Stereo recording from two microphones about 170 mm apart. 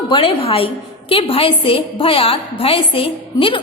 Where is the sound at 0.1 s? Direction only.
30° left (ahead or behind).